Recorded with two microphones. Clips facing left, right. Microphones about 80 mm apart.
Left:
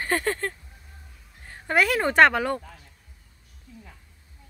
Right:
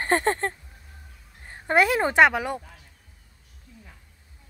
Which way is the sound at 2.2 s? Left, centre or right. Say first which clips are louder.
Left 2 dB; centre.